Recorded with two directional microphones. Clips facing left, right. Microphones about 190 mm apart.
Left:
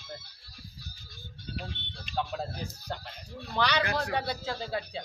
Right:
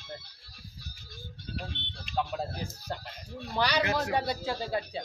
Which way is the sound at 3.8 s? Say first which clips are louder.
Right 2 dB; 20° right (ahead or behind).